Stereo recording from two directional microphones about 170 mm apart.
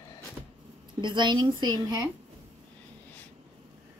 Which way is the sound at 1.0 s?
25° right (ahead or behind).